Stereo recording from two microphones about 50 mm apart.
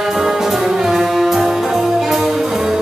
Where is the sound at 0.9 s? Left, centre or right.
Centre.